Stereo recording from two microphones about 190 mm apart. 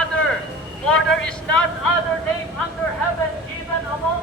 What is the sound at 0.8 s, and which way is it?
Speech, 5° left (ahead or behind).